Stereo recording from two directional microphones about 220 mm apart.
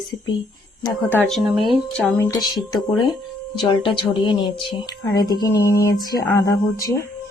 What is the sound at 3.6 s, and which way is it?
Speech, 20° left (ahead or behind).